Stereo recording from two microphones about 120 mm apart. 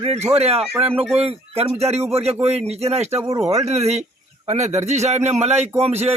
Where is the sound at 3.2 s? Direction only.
30° right (ahead or behind).